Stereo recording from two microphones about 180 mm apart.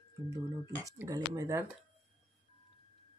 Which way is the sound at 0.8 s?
20° right (ahead or behind).